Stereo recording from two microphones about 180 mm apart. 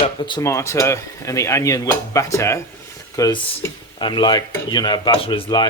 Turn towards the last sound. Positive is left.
turn(degrees=25)  # may be behind; listen again after turning